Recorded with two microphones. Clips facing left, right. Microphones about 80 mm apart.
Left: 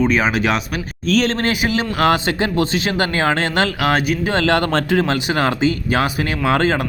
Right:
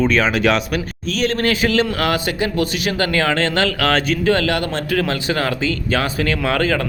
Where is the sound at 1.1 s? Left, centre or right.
Left.